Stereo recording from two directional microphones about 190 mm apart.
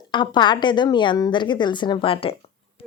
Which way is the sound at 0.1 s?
25° left (ahead or behind).